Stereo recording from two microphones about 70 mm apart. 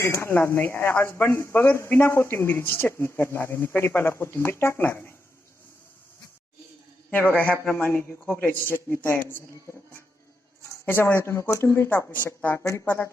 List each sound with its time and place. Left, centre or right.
0.0 s speech: left
7.3 s speech: left
10.8 s speech: left
11.9 s speech: left